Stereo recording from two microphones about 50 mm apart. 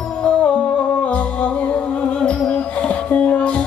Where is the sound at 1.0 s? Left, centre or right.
Left.